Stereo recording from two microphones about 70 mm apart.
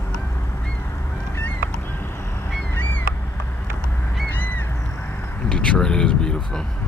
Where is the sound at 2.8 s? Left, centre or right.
Left.